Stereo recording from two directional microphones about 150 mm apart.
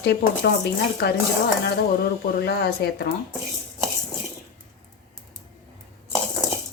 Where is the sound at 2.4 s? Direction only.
90° left.